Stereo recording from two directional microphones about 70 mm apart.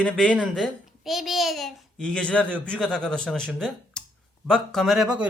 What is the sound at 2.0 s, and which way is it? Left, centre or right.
Speech, centre.